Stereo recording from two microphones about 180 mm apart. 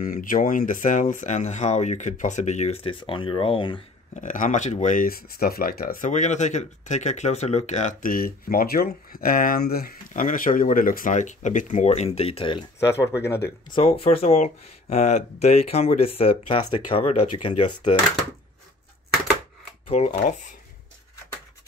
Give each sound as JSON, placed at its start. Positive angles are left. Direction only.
{"t": 0.0, "sound": "speech", "side_deg": 50}
{"t": 4.1, "sound": "speech", "side_deg": 45}
{"t": 12.8, "sound": "speech", "side_deg": 15}
{"t": 13.7, "sound": "speech", "side_deg": 30}
{"t": 19.9, "sound": "speech", "side_deg": 40}